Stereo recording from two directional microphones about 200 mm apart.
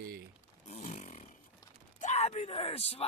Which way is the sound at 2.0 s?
35° left (ahead or behind).